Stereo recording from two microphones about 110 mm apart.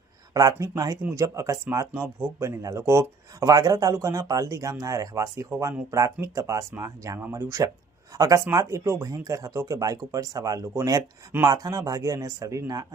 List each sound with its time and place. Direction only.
0.3 s speech: 30° right (ahead or behind)